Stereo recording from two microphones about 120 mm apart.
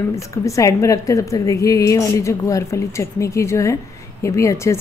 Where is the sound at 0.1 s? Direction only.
25° left (ahead or behind).